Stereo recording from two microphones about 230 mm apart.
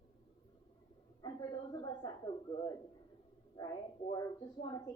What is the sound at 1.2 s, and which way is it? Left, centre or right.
A woman's voice, centre.